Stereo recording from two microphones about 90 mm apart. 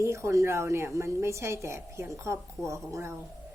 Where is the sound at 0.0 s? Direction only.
30° right (ahead or behind).